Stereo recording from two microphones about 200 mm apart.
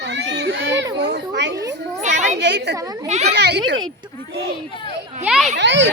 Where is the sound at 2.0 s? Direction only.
35° right (ahead or behind).